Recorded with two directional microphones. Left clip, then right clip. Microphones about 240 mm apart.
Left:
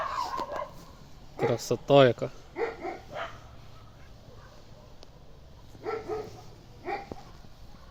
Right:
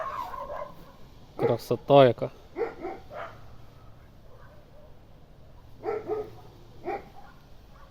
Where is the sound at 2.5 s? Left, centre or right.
Right.